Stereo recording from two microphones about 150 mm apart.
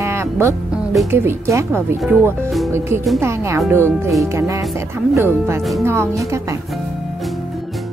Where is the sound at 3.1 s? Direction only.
20° right (ahead or behind).